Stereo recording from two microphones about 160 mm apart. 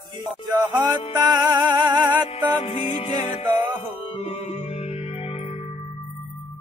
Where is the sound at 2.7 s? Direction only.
35° left (ahead or behind).